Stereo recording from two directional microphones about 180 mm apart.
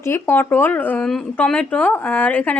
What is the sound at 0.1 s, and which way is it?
Speech, 10° left (ahead or behind).